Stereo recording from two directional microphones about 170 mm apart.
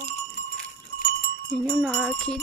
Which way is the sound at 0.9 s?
65° left (ahead or behind).